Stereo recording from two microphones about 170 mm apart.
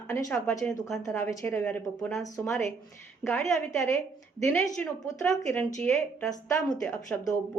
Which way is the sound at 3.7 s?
15° left (ahead or behind).